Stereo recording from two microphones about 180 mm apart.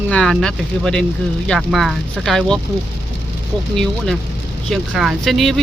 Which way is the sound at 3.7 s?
5° left (ahead or behind).